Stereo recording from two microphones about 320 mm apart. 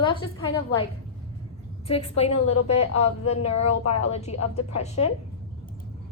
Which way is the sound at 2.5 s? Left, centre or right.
Left.